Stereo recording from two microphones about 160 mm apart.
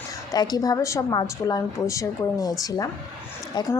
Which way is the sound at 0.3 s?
25° left (ahead or behind).